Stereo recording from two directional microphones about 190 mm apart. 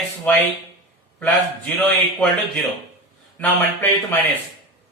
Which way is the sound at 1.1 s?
5° left (ahead or behind).